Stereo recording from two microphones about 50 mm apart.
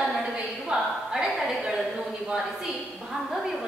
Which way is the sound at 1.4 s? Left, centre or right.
Centre.